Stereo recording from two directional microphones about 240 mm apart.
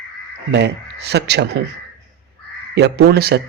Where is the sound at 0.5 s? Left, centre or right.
Right.